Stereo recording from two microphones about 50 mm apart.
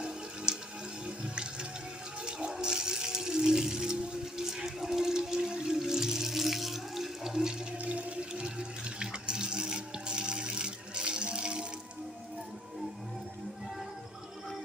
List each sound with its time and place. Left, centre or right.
0.5 s water: centre
7.8 s water: right